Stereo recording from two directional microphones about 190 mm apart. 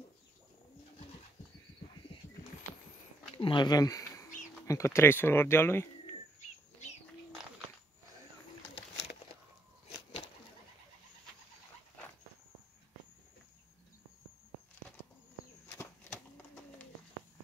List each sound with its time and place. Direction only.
3.3 s speech: 25° left (ahead or behind)
6.8 s bird: 35° left (ahead or behind)
15.7 s bird flight: 10° left (ahead or behind)